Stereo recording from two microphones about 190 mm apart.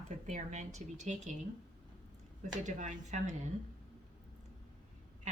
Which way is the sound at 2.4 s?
40° right (ahead or behind).